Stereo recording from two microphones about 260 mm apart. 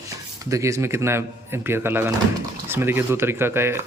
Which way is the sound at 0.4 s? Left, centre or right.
Centre.